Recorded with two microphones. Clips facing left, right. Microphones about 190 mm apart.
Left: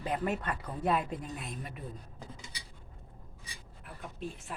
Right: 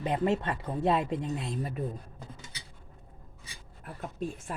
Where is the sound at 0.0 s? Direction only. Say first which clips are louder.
Right 5 dB; 25° right (ahead or behind).